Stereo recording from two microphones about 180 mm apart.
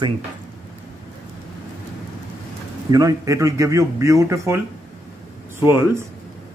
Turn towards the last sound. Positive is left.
turn(degrees=-15)  # may be behind; listen again after turning